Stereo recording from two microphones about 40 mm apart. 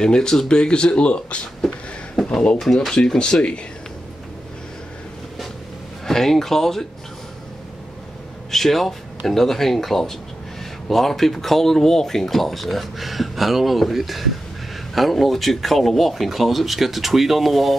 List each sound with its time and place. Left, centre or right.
0.0 s speech: centre
2.6 s speech: centre
3.0 s speech: left
6.0 s speech: centre
8.5 s speech: centre